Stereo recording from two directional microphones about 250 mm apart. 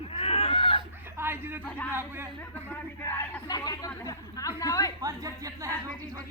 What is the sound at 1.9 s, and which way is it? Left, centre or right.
Speech, centre.